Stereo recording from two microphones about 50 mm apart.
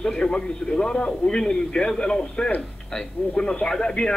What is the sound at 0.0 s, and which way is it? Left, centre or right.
Speech, centre.